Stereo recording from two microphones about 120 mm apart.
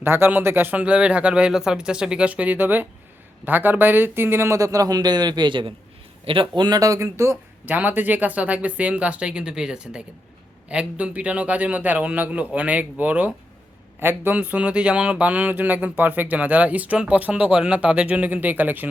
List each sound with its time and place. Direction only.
0.0 s speech: 20° right (ahead or behind); by 6.5 s 50° right (ahead or behind)
6.6 s speech: 30° right (ahead or behind); by 18.9 s 15° right (ahead or behind)